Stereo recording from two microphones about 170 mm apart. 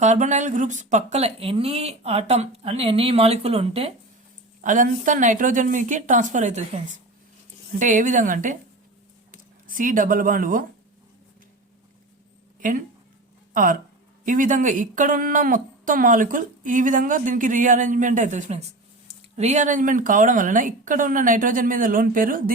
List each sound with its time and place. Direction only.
0.0 s speech: 45° right (ahead or behind)
4.6 s speech: 50° right (ahead or behind)
13.5 s speech: 50° right (ahead or behind)